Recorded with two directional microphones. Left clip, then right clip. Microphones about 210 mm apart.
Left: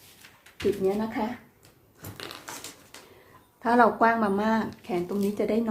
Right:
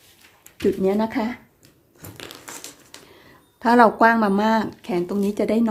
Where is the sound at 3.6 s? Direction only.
40° right (ahead or behind).